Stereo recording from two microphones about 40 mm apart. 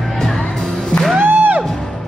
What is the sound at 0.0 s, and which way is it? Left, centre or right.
Music, centre.